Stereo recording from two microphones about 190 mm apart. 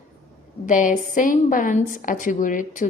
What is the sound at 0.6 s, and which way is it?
A woman's voice, 45° left (ahead or behind).